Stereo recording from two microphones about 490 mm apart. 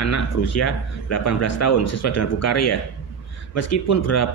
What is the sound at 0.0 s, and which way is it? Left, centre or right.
A man's voice, left.